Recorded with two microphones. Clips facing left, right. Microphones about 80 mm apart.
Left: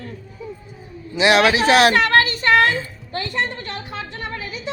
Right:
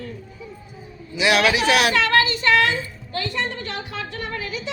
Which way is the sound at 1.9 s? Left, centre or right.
Left.